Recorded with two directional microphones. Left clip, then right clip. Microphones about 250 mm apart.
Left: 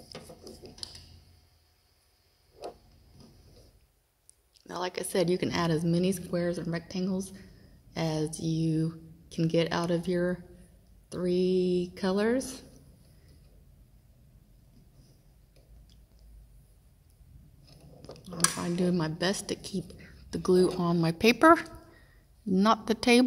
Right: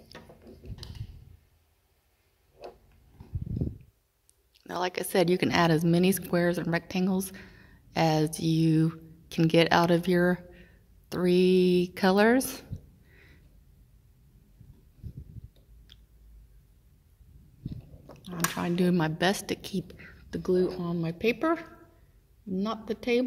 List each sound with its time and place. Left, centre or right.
4.6 s speech: centre
18.5 s speech: centre
20.8 s speech: left